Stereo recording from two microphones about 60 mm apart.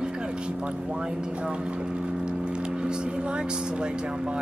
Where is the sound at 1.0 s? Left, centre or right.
Centre.